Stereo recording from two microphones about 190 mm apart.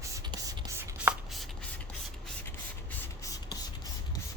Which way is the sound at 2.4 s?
10° left (ahead or behind).